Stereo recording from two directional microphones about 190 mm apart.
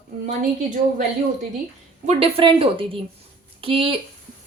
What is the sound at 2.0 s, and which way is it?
A woman's voice, 30° right (ahead or behind).